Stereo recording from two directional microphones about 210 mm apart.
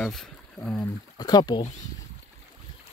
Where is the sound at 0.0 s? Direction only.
Centre (ahead or behind).